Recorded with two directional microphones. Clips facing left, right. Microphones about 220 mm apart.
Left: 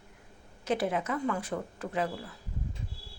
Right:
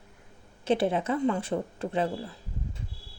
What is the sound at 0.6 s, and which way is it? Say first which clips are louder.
A woman's voice: right 4 dB; 25° right (ahead or behind).